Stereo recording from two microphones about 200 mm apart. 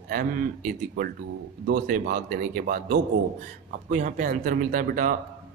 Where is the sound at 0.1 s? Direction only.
45° right (ahead or behind).